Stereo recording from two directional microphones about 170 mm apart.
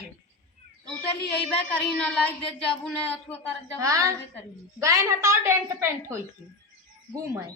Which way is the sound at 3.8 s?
20° right (ahead or behind).